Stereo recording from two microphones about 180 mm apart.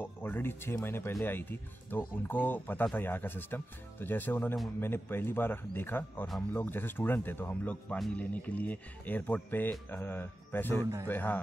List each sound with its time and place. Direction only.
0.0 s speech: 10° left (ahead or behind)
10.8 s speech: 20° right (ahead or behind)
11.1 s speech: 10° left (ahead or behind)